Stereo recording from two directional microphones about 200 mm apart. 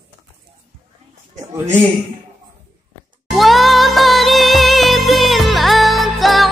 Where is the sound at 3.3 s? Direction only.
Centre (ahead or behind).